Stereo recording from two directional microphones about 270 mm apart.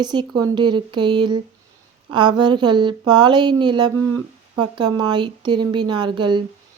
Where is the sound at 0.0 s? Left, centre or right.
Centre.